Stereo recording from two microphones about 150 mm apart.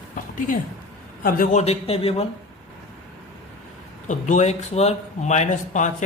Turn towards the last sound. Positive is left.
turn(degrees=55)  # may be behind; listen again after turning